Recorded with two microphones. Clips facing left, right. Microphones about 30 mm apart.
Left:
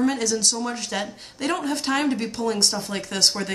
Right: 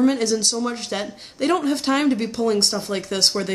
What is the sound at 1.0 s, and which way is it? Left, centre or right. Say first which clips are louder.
Speech: right 4 dB; right.